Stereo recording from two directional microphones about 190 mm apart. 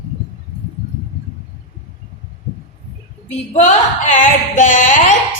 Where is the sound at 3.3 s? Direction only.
35° left (ahead or behind).